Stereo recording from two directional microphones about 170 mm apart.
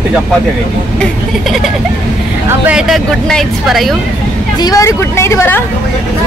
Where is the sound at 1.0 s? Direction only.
Centre (ahead or behind).